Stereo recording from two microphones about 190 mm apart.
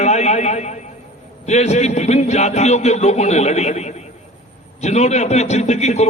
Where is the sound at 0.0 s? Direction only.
35° left (ahead or behind).